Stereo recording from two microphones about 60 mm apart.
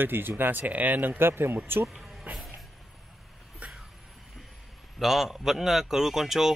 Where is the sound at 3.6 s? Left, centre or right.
Right.